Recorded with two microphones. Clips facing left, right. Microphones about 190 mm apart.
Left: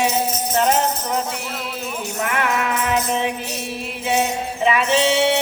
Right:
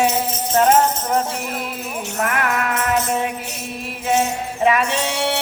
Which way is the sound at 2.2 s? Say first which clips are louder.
Even; 45° right (ahead or behind).